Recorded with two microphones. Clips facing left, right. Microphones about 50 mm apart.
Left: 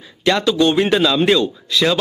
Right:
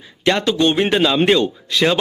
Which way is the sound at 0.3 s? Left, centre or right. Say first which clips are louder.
Left 1 dB; right.